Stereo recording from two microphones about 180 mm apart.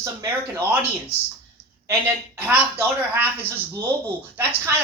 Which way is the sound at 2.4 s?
10° right (ahead or behind).